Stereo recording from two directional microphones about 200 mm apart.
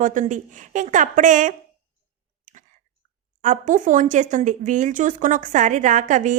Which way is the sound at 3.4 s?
40° right (ahead or behind).